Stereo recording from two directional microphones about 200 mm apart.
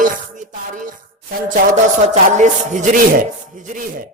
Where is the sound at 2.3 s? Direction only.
40° right (ahead or behind).